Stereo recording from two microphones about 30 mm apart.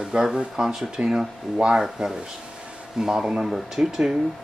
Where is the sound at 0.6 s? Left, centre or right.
Right.